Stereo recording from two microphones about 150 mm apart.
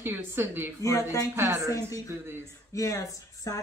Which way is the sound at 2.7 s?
20° left (ahead or behind).